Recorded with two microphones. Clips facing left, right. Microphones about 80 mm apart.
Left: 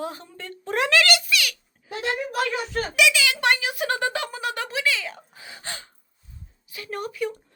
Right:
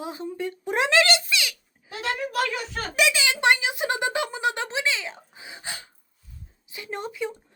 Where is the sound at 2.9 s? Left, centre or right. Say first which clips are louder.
Left 1 dB; right.